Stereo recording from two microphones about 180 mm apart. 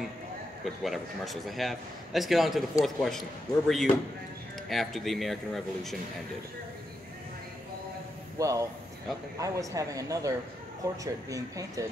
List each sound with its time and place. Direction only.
0.7 s a man's voice: centre (ahead or behind)
8.4 s speech: 15° right (ahead or behind)